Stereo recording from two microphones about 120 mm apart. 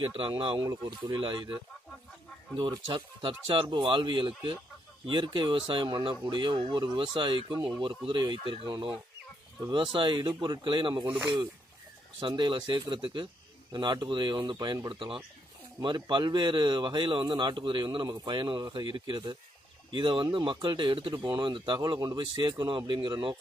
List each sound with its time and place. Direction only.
0.0 s speech: 50° right (ahead or behind)
2.5 s speech: 45° right (ahead or behind)
11.1 s speech: 15° right (ahead or behind)
12.2 s speech: 40° right (ahead or behind)